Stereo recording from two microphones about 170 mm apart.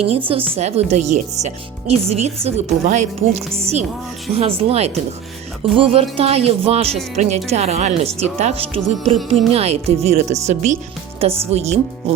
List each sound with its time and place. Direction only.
0.3 s speech: 35° right (ahead or behind)